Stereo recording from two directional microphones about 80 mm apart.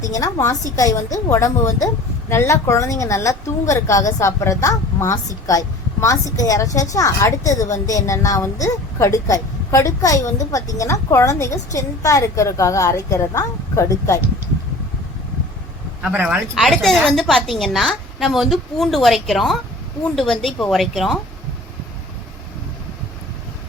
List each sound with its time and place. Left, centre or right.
0.0 s a woman's voice: left
16.1 s speech: right
16.6 s a woman's voice: centre